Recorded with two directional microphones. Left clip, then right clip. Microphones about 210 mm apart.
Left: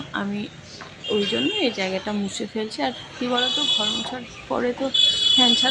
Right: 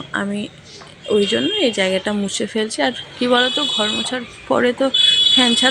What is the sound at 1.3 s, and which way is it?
Speech, 25° right (ahead or behind).